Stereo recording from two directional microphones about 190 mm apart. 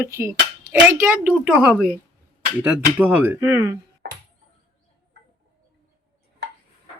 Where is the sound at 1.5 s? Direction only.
5° right (ahead or behind).